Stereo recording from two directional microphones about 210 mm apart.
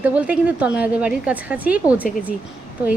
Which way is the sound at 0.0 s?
5° right (ahead or behind).